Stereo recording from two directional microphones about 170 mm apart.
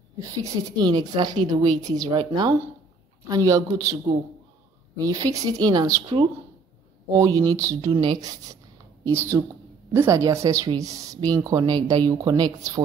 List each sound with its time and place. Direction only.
0.2 s a woman's voice: 20° right (ahead or behind)
4.9 s a woman's voice: 20° right (ahead or behind)